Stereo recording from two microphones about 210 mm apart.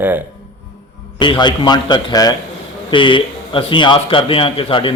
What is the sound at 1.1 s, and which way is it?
Speech, 20° left (ahead or behind).